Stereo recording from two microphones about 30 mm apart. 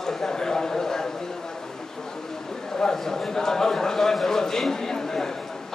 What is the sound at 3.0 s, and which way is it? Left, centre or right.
A man's voice, centre.